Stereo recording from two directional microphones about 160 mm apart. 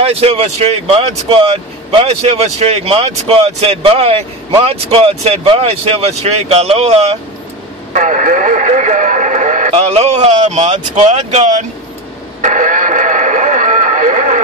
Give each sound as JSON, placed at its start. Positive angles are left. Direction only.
{"t": 0.0, "sound": "speech", "side_deg": -40}
{"t": 7.9, "sound": "radio", "side_deg": -55}